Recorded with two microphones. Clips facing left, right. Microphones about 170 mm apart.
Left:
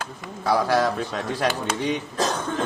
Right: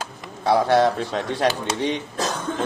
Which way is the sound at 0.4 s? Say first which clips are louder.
Right 3 dB; 25° right (ahead or behind).